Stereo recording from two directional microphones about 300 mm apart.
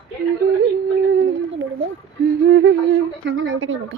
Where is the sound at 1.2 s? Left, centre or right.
Right.